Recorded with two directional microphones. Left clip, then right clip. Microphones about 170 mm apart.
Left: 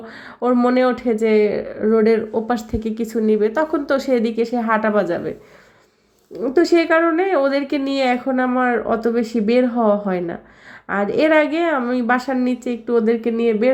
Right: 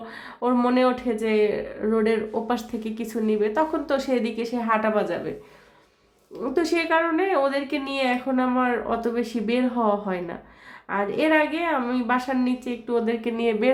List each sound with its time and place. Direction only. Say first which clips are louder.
0.3 s speech: left 5 dB; 25° left (ahead or behind)
6.4 s speech: left 8 dB; 30° left (ahead or behind)